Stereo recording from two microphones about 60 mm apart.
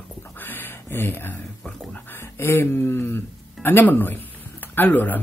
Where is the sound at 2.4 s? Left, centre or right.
Left.